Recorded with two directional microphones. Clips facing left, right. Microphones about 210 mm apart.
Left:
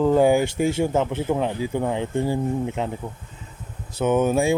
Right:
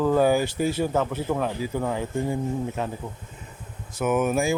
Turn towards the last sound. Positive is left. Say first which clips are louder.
# left 3 dB
turn(degrees=30)  # may be behind; listen again after turning